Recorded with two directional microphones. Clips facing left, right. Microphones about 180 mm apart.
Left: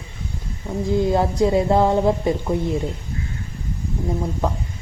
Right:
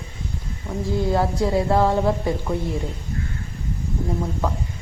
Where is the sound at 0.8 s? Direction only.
20° left (ahead or behind).